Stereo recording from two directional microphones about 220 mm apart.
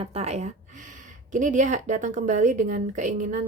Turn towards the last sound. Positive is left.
turn(degrees=-35)  # may be behind; listen again after turning